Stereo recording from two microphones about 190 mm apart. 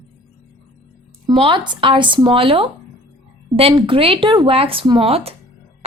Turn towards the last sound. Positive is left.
turn(degrees=-30)  # may be behind; listen again after turning